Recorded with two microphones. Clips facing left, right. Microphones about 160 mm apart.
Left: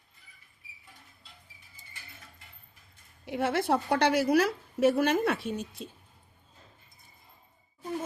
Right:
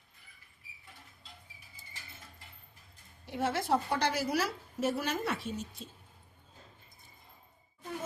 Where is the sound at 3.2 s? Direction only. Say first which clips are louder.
Left 5 dB; 65° left (ahead or behind).